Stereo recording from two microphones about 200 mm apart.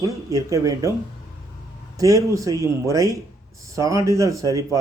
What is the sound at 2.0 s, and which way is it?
Speech, 15° right (ahead or behind).